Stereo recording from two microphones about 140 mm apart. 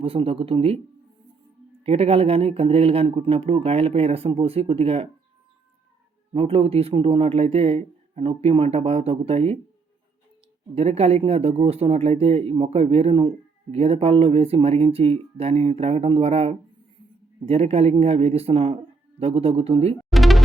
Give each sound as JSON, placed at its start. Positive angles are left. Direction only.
{"t": 0.0, "sound": "speech", "side_deg": -40}
{"t": 1.8, "sound": "speech", "side_deg": -45}
{"t": 6.3, "sound": "speech", "side_deg": -40}
{"t": 10.8, "sound": "speech", "side_deg": -45}
{"t": 20.1, "sound": "music", "side_deg": 0}